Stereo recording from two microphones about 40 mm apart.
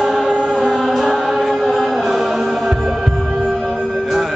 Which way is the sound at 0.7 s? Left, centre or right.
Centre.